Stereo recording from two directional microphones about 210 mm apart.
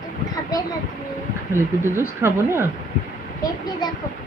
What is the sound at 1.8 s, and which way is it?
Speech, 10° right (ahead or behind).